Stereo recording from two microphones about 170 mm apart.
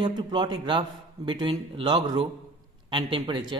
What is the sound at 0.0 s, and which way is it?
A man's voice, 25° right (ahead or behind).